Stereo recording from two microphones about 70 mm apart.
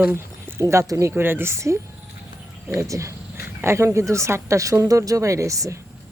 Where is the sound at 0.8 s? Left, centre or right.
Right.